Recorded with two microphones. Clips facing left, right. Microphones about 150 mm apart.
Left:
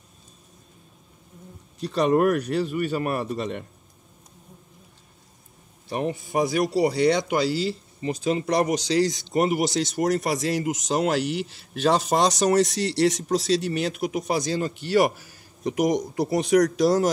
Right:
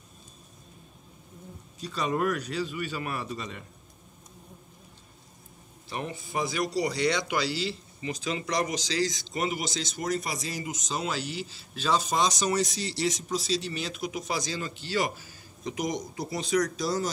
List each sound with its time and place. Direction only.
1.8 s speech: 60° left (ahead or behind)
5.9 s speech: 45° left (ahead or behind); by 17.1 s 75° left (ahead or behind)